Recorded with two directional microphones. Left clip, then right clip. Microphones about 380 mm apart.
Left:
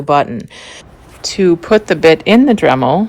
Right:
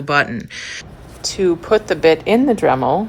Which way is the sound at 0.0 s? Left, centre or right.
Centre.